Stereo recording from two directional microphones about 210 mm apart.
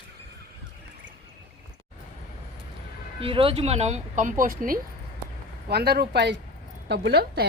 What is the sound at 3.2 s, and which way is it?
A woman's voice, 25° right (ahead or behind).